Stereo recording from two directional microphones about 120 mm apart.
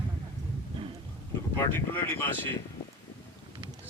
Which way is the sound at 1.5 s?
15° left (ahead or behind).